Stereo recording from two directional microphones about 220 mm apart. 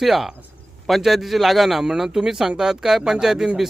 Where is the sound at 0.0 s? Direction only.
Centre (ahead or behind).